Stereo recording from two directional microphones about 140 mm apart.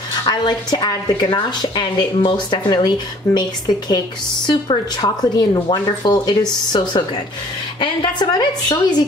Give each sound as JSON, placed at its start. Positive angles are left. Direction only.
{"t": 0.2, "sound": "speech", "side_deg": 30}